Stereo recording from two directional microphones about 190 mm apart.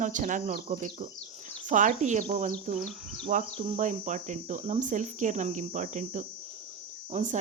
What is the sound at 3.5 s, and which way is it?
Speech, 35° right (ahead or behind).